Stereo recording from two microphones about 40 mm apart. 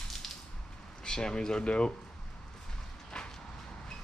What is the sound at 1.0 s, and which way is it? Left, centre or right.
Speech, centre.